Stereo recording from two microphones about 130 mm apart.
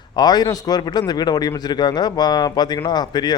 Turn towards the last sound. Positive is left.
turn(degrees=30)  # may be behind; listen again after turning